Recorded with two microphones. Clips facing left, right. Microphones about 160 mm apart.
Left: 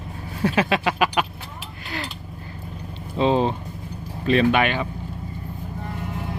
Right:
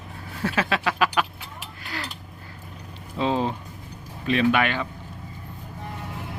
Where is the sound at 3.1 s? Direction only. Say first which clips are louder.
Left 4 dB; 25° left (ahead or behind).